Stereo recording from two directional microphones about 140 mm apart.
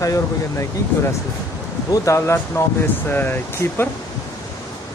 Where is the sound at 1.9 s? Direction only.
20° left (ahead or behind).